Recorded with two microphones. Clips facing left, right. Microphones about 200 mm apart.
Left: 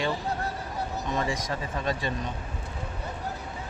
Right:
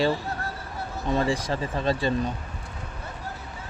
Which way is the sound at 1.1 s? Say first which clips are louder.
Right 7 dB; 35° right (ahead or behind).